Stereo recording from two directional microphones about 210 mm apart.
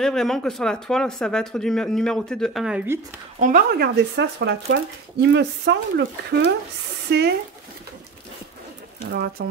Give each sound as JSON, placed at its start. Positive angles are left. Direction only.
{"t": 0.0, "sound": "speech", "side_deg": 0}
{"t": 3.3, "sound": "speech", "side_deg": -40}
{"t": 9.4, "sound": "speech", "side_deg": -50}